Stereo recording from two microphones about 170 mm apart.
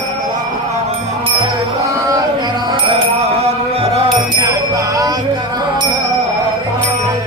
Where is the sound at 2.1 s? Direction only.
25° right (ahead or behind).